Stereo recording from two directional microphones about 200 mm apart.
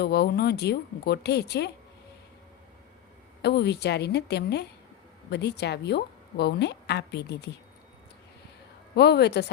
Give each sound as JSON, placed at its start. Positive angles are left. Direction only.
{"t": 0.0, "sound": "a woman's voice", "side_deg": 55}
{"t": 3.4, "sound": "a woman's voice", "side_deg": 55}
{"t": 9.0, "sound": "a woman's voice", "side_deg": 55}